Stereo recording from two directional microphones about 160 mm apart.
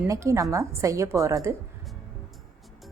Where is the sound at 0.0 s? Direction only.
20° right (ahead or behind).